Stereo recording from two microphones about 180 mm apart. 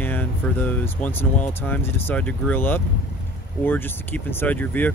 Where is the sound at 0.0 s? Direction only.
10° left (ahead or behind).